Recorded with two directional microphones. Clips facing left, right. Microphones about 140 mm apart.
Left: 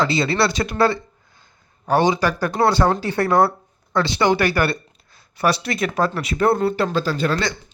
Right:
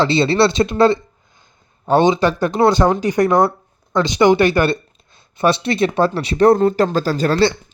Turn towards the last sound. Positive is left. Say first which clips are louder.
# right 6 dB
turn(degrees=-30)  # may be behind; listen again after turning